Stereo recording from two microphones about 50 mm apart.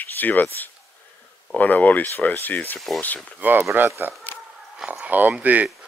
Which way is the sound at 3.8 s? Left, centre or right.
Right.